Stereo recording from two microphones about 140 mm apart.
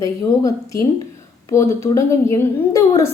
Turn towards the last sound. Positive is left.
turn(degrees=20)  # may be behind; listen again after turning